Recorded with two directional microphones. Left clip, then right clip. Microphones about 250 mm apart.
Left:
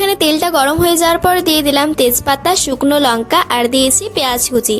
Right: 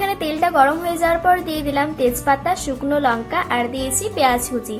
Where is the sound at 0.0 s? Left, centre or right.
Left.